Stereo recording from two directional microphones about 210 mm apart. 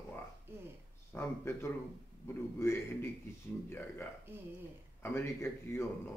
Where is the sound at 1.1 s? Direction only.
10° left (ahead or behind).